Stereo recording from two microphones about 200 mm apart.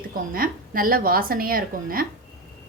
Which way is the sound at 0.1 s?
45° right (ahead or behind).